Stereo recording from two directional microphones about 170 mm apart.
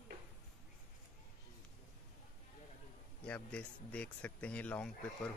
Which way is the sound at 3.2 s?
5° left (ahead or behind).